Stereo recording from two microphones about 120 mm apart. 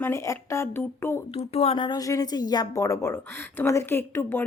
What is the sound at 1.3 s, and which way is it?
Speech, 55° left (ahead or behind).